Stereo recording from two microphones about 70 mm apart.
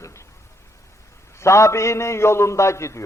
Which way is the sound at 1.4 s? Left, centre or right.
Left.